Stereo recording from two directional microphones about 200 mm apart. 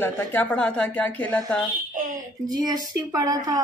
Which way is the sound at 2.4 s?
20° right (ahead or behind).